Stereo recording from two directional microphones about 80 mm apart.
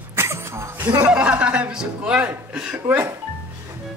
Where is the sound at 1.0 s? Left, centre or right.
Centre.